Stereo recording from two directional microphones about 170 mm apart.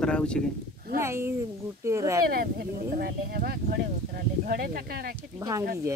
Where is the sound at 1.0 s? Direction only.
15° right (ahead or behind).